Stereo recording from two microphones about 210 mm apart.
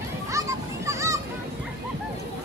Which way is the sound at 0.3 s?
15° right (ahead or behind).